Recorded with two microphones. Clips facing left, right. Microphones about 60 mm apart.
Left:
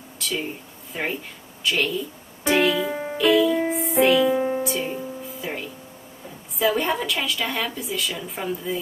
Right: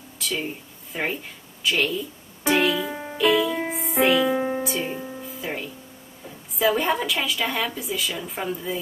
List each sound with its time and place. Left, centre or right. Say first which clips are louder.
0.2 s a sound: even; centre
0.9 s a woman's voice: right 1 dB; centre
1.6 s music: even; centre
6.6 s a woman's voice: right 1 dB; centre